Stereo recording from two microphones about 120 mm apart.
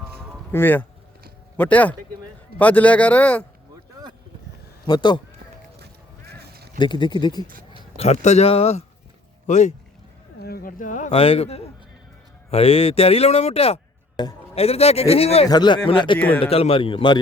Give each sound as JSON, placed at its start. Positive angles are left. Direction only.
{"t": 0.5, "sound": "speech", "side_deg": 15}
{"t": 4.9, "sound": "speech", "side_deg": 40}
{"t": 6.7, "sound": "speech", "side_deg": 40}
{"t": 7.9, "sound": "speech", "side_deg": 65}
{"t": 9.5, "sound": "a man's voice", "side_deg": 85}
{"t": 11.1, "sound": "speech", "side_deg": 50}
{"t": 14.2, "sound": "speech", "side_deg": 35}
{"t": 14.5, "sound": "speech", "side_deg": 55}
{"t": 15.4, "sound": "speech", "side_deg": 35}
{"t": 16.1, "sound": "speech", "side_deg": 15}
{"t": 16.4, "sound": "a man's voice", "side_deg": 55}